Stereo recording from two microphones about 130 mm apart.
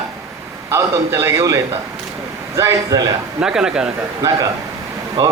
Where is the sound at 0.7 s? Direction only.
20° right (ahead or behind).